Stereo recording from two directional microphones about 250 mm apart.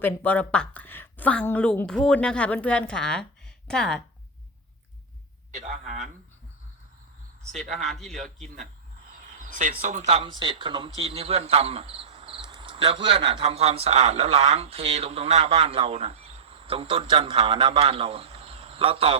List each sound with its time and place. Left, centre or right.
0.0 s a woman's voice: centre
5.5 s speech: right
7.5 s speech: right
7.9 s a woman's voice: centre
9.3 s speech: right